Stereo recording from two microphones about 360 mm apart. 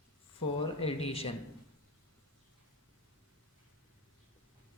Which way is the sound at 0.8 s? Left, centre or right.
Centre.